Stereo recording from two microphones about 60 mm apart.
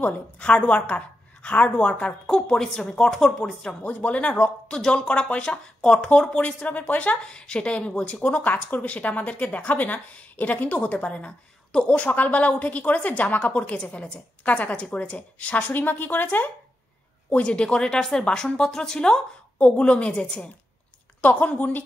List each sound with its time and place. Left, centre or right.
0.0 s speech: left
4.6 s a woman's voice: centre; by 16.5 s left
17.3 s a woman's voice: centre